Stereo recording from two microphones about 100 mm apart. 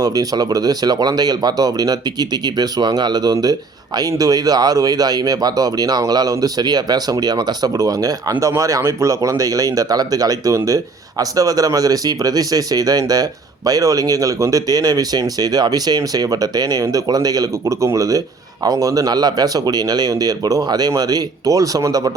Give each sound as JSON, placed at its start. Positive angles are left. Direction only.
{"t": 0.0, "sound": "speech", "side_deg": -40}